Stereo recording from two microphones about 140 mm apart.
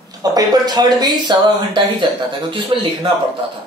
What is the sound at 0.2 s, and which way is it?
Speech, 25° right (ahead or behind).